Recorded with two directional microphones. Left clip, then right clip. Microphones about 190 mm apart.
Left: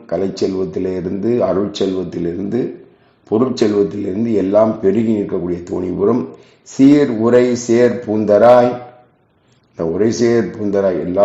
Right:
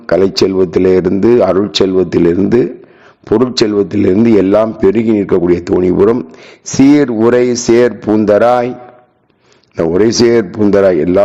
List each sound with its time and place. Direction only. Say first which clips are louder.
0.0 s a man's voice: right 8 dB; 45° right (ahead or behind)
9.7 s a man's voice: right 6 dB; 45° right (ahead or behind)